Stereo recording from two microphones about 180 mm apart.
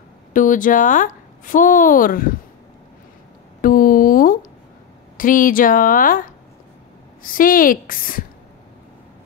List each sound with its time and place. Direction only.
0.3 s speech: 45° left (ahead or behind)
3.6 s a sound: 50° left (ahead or behind)
5.1 s speech: 50° left (ahead or behind)